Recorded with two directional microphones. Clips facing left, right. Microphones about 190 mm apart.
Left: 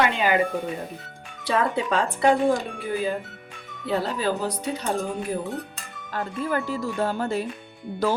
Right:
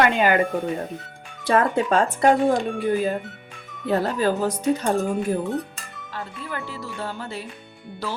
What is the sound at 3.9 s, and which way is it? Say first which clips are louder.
Speech: right 3 dB; 50° right (ahead or behind).